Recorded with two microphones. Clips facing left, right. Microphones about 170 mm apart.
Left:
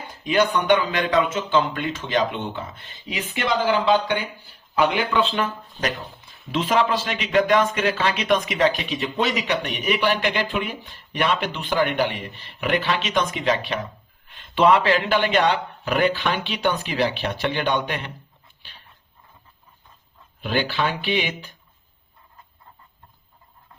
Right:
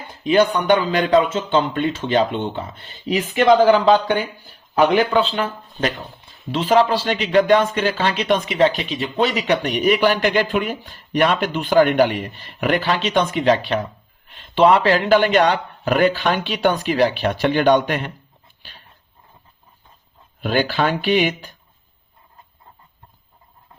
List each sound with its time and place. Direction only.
0.3 s speech: 30° right (ahead or behind)
20.4 s speech: 45° right (ahead or behind)